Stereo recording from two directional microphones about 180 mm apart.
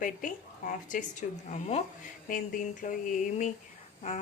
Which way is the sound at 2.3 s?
50° left (ahead or behind).